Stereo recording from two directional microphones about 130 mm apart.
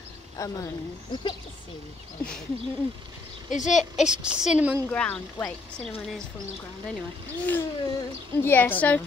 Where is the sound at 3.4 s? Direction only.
70° left (ahead or behind).